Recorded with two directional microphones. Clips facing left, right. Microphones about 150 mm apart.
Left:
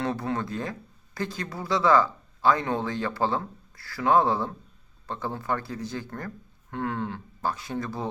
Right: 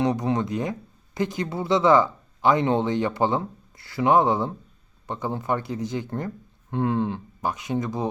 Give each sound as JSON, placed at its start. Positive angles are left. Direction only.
{"t": 0.0, "sound": "speech", "side_deg": -20}